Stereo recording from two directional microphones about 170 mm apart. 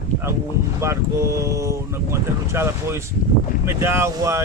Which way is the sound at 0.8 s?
15° right (ahead or behind).